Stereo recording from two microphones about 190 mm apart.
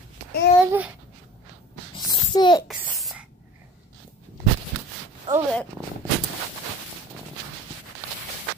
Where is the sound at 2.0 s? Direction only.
20° left (ahead or behind).